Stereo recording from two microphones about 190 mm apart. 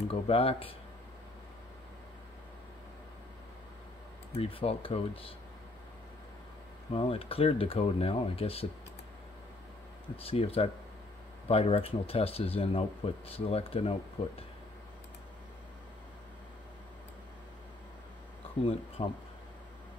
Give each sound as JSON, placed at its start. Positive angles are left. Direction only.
{"t": 0.1, "sound": "speech", "side_deg": 30}
{"t": 4.4, "sound": "speech", "side_deg": 30}
{"t": 6.9, "sound": "speech", "side_deg": 30}
{"t": 10.1, "sound": "speech", "side_deg": 30}
{"t": 19.0, "sound": "speech", "side_deg": 30}